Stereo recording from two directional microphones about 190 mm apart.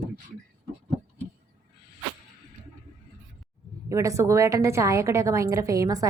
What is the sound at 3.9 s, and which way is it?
A woman's voice, 15° right (ahead or behind).